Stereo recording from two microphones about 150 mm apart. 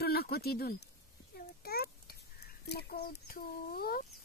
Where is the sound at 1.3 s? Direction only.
90° left.